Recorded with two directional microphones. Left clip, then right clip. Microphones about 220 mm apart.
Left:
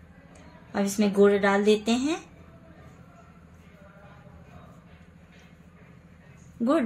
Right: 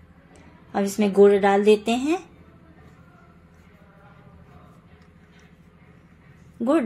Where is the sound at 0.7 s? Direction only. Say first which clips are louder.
Right 5 dB; 15° right (ahead or behind).